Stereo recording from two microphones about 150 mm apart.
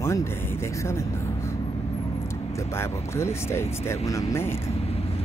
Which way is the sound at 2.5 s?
15° left (ahead or behind).